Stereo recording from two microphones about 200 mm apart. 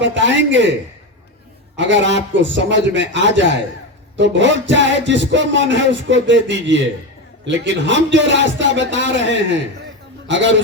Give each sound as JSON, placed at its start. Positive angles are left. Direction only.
{"t": 0.0, "sound": "speech", "side_deg": -65}
{"t": 1.7, "sound": "a man's voice", "side_deg": -65}